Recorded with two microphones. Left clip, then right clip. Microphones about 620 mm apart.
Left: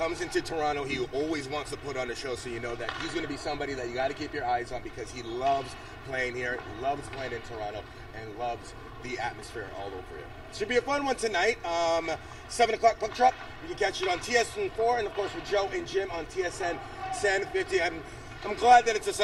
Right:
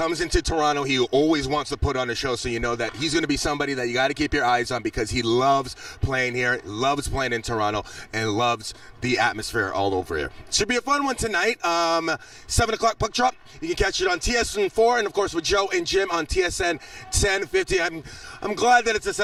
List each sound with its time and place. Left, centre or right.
0.0 s speech: right
3.2 s a man's voice: right
6.1 s a man's voice: right
10.5 s a man's voice: right
15.4 s a man's voice: right